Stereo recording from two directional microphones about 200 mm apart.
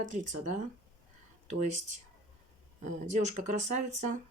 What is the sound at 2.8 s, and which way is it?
Speech, 35° right (ahead or behind).